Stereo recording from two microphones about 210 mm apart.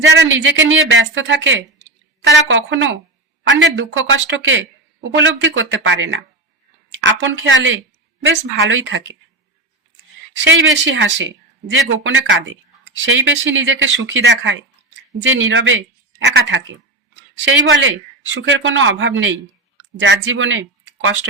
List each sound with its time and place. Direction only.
0.0 s speech: 55° right (ahead or behind)
10.3 s a woman's voice: 60° right (ahead or behind)